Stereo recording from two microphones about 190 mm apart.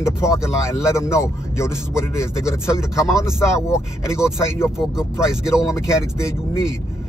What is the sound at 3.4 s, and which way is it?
Speech, 15° left (ahead or behind).